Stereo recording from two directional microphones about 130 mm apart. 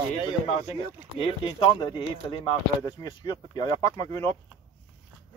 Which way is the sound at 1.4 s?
35° left (ahead or behind).